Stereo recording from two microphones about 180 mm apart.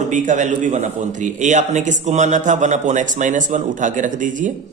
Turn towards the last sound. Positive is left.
turn(degrees=-45)  # may be behind; listen again after turning